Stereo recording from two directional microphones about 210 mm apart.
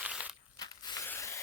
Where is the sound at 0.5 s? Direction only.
20° left (ahead or behind).